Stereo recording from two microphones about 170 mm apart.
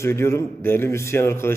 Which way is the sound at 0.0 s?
15° left (ahead or behind).